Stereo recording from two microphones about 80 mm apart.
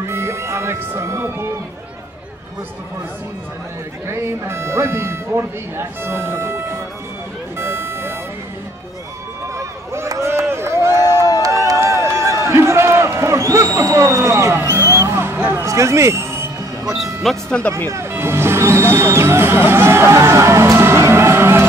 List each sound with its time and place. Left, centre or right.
0.0 s music: right
4.1 s speech: right
7.5 s music: right
9.6 s run: right
11.4 s a sound: right
15.5 s music: right
16.8 s music: centre
17.8 s music: right